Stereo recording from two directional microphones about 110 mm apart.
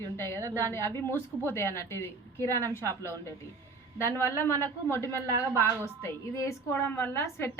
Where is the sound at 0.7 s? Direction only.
20° left (ahead or behind).